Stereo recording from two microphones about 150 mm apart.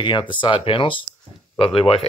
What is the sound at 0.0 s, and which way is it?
Speech, 30° left (ahead or behind).